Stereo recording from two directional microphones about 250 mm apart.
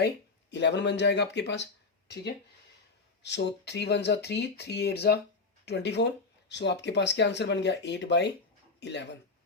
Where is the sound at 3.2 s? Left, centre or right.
Left.